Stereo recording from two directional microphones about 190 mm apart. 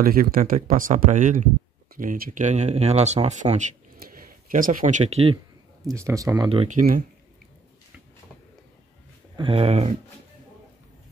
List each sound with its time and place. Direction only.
0.0 s speech: 50° right (ahead or behind)
4.1 s speech: 45° right (ahead or behind); by 5.4 s 30° right (ahead or behind)
5.9 s speech: 15° right (ahead or behind)
6.7 s speech: 40° right (ahead or behind)
9.4 s speech: 30° right (ahead or behind)